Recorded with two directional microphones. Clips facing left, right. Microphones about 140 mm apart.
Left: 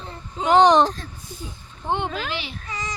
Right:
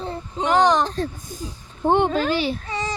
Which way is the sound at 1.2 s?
45° right (ahead or behind).